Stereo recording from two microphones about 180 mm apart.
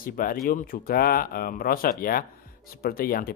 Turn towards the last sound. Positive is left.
turn(degrees=55)  # may be behind; listen again after turning